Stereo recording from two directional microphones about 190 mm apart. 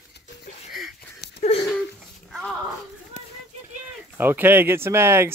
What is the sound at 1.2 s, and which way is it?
Wheeze, 60° left (ahead or behind).